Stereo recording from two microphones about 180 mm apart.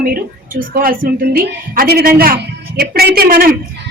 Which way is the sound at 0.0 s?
50° right (ahead or behind).